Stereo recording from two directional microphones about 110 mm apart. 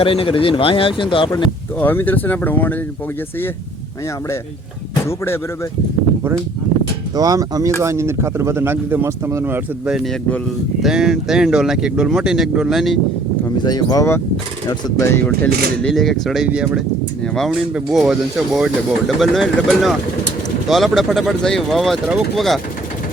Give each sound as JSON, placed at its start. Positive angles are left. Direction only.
{"t": 0.0, "sound": "a man's voice", "side_deg": 55}
{"t": 1.8, "sound": "speech", "side_deg": 20}
{"t": 5.0, "sound": "speech", "side_deg": 25}
{"t": 7.2, "sound": "speech", "side_deg": -35}
{"t": 10.1, "sound": "speech", "side_deg": 10}
{"t": 10.8, "sound": "speech", "side_deg": -5}
{"t": 13.6, "sound": "speech", "side_deg": 40}
{"t": 15.0, "sound": "speech", "side_deg": 20}
{"t": 15.8, "sound": "speech", "side_deg": 5}